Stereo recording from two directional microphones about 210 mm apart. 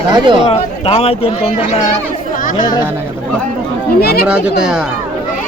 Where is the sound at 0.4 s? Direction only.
30° left (ahead or behind).